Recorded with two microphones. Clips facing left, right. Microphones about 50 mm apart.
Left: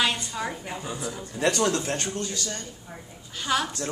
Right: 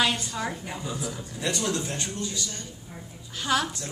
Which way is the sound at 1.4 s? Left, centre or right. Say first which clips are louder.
Left 5 dB; left.